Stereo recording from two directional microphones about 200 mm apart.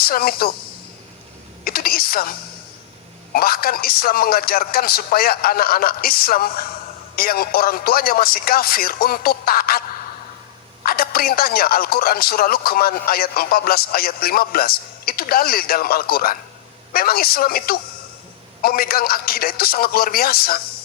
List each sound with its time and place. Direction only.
0.0 s speech: 50° left (ahead or behind)
1.6 s speech: 50° left (ahead or behind)
3.3 s speech: 50° left (ahead or behind)
10.8 s speech: 50° left (ahead or behind)